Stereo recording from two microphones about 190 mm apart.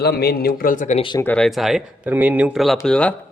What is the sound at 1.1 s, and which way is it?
Speech, 10° left (ahead or behind).